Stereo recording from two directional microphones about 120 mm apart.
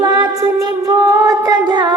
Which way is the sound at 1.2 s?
35° right (ahead or behind).